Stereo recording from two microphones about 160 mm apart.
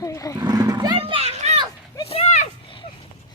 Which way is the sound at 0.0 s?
20° left (ahead or behind).